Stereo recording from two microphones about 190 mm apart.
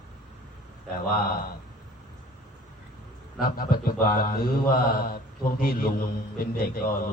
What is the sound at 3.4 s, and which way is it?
Mantra, 50° left (ahead or behind).